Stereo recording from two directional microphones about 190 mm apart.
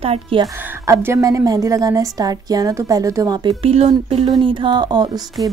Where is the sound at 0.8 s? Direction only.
15° right (ahead or behind).